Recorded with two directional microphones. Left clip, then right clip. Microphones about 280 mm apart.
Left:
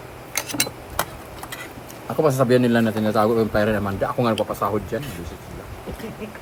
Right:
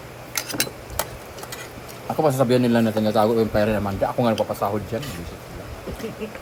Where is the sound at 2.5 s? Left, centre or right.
Centre.